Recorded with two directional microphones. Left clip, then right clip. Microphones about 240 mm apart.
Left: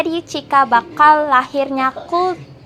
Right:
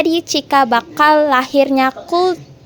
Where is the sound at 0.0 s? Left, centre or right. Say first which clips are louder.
Right 5 dB; right.